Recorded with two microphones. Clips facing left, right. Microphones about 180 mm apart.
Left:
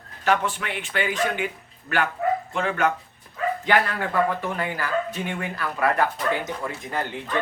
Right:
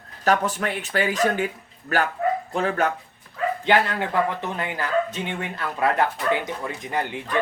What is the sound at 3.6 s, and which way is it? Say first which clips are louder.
Speech: right 2 dB; 25° right (ahead or behind).